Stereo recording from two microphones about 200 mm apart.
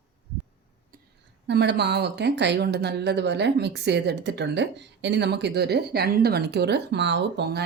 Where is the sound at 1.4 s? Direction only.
60° right (ahead or behind).